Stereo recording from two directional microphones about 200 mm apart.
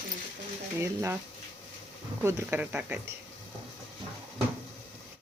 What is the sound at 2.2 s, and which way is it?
Speech, 10° right (ahead or behind).